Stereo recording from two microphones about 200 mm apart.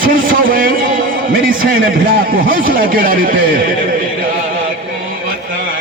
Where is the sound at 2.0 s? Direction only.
45° right (ahead or behind).